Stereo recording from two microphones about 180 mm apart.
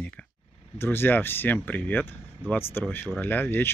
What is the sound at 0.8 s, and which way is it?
A man's voice, 10° left (ahead or behind).